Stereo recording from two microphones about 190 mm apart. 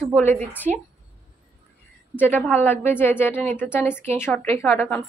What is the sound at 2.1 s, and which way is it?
A woman's voice, 10° left (ahead or behind).